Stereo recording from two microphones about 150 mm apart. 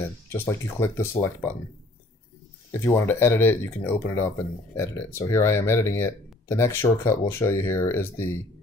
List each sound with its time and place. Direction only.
0.3 s speech: 15° left (ahead or behind)
2.8 s speech: 15° left (ahead or behind)